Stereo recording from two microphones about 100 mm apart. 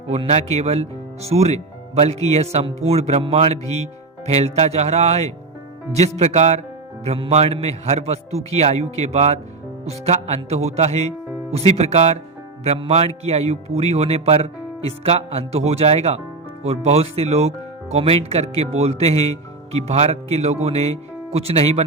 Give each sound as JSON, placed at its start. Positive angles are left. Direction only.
{"t": 0.1, "sound": "speech", "side_deg": -90}